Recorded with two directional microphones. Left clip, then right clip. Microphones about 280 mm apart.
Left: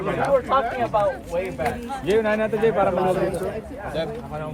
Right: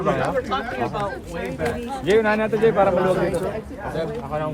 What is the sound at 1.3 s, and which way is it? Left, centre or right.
Speech, centre.